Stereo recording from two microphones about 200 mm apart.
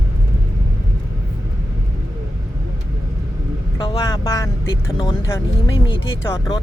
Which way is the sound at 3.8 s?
20° left (ahead or behind).